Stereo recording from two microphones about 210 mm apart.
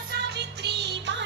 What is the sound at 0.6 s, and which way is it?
Music, 55° right (ahead or behind).